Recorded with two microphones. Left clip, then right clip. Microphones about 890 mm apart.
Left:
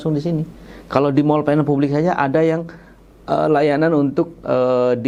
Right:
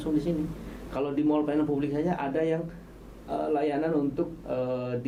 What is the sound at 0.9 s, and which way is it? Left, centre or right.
Speech, left.